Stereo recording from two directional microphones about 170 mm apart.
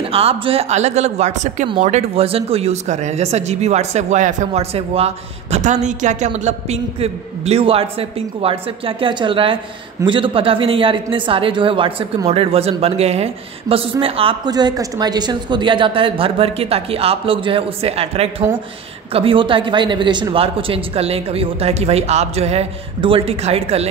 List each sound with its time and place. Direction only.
0.1 s a woman's voice: 35° right (ahead or behind)